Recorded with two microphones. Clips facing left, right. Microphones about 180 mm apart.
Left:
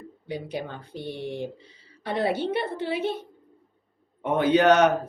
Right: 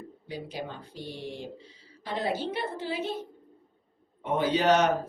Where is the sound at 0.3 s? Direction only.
65° left (ahead or behind).